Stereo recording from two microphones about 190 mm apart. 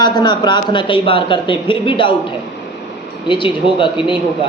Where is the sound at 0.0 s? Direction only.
20° left (ahead or behind).